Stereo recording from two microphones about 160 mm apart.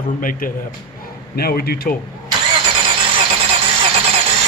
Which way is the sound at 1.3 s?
75° left (ahead or behind).